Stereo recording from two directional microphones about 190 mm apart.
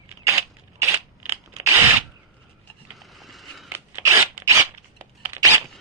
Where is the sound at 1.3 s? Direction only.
15° right (ahead or behind).